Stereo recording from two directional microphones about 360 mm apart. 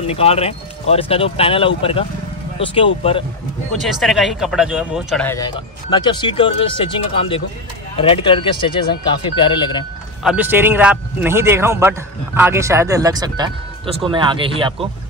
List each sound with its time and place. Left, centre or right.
0.0 s speech: centre
3.8 s speech: centre
10.2 s speech: centre